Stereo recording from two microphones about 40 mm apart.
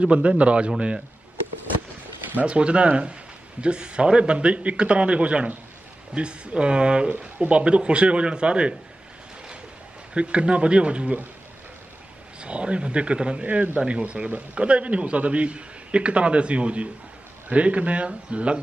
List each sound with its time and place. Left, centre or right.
0.0 s a man's voice: right
2.4 s a man's voice: right
10.1 s speech: right
12.4 s a man's voice: right